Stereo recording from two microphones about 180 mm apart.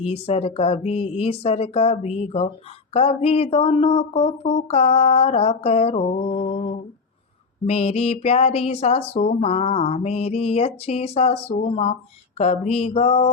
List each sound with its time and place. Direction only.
0.0 s speech: 35° left (ahead or behind)